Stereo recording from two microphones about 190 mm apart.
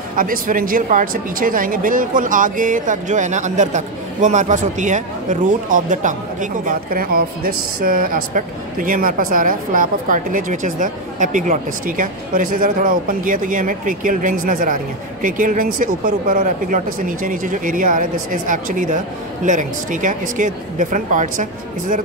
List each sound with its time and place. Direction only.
0.1 s speech: 45° right (ahead or behind)